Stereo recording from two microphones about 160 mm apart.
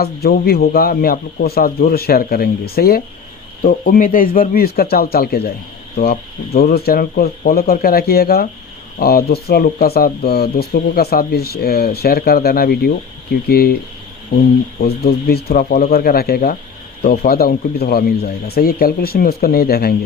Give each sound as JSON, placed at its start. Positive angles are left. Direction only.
{"t": 0.0, "sound": "speech", "side_deg": 75}
{"t": 3.6, "sound": "speech", "side_deg": 60}
{"t": 6.6, "sound": "speech", "side_deg": 75}
{"t": 14.8, "sound": "speech", "side_deg": 80}